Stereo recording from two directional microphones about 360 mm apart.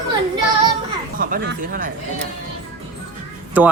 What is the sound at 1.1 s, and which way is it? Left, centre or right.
Speech, right.